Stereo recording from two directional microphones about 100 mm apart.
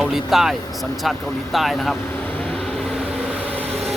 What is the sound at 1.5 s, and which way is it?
Speech, centre (ahead or behind).